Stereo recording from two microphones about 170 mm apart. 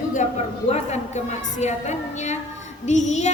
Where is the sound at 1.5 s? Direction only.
45° left (ahead or behind).